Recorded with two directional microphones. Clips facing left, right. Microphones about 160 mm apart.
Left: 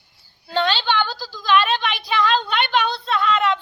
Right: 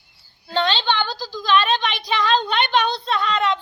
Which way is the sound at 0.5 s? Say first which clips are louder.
Even; 10° left (ahead or behind).